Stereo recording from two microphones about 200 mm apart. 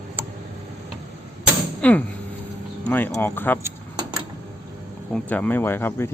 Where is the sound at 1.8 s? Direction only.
5° left (ahead or behind).